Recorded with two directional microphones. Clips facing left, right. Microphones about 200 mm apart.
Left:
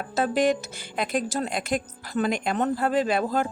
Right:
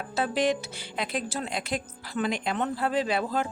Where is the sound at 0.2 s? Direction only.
45° left (ahead or behind).